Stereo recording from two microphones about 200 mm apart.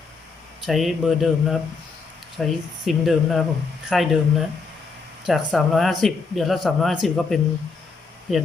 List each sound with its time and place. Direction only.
0.6 s speech: centre (ahead or behind)